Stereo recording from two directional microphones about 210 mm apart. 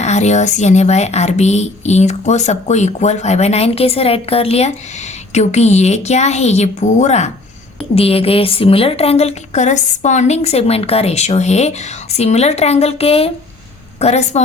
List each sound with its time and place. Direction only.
0.0 s a woman's voice: 35° left (ahead or behind)